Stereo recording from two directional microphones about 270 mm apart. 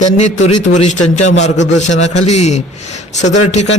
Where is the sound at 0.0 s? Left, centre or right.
Left.